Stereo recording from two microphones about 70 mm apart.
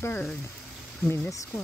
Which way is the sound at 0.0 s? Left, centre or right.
Left.